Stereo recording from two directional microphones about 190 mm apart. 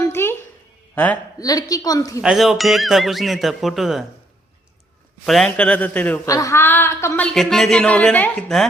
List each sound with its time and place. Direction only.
0.0 s a sound: 15° left (ahead or behind)
0.9 s speech: 10° left (ahead or behind)
1.5 s a woman's voice: 20° left (ahead or behind)
2.2 s speech: centre (ahead or behind)
5.2 s a woman's voice: centre (ahead or behind)
7.3 s speech: centre (ahead or behind)